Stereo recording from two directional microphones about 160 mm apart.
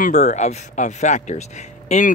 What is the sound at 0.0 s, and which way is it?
Speech, 45° left (ahead or behind).